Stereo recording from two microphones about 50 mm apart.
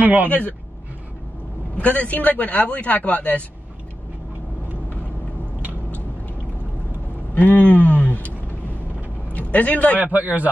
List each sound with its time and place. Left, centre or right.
0.0 s a man's voice: right
0.3 s a man's voice: left
1.8 s a man's voice: left
7.3 s speech: left
9.9 s a man's voice: right